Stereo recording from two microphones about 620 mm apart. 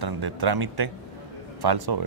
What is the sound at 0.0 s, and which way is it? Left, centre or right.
Speech, right.